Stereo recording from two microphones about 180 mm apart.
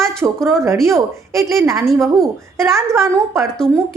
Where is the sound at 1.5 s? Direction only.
15° right (ahead or behind).